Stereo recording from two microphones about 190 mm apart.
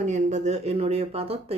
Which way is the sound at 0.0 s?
40° right (ahead or behind).